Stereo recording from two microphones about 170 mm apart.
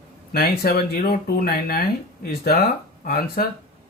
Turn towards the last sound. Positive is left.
turn(degrees=60)  # may be behind; listen again after turning